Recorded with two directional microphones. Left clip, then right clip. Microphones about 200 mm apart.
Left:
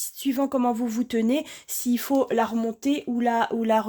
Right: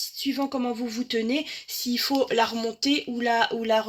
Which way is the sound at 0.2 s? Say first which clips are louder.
Left 4 dB; 55° left (ahead or behind).